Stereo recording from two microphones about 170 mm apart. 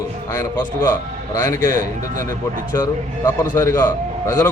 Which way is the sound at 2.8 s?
15° left (ahead or behind).